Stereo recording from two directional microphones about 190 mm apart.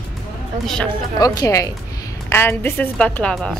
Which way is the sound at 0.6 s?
5° left (ahead or behind).